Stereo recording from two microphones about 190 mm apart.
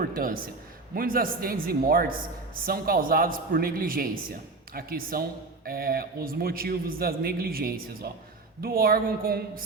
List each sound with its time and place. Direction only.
0.0 s speech: 50° right (ahead or behind)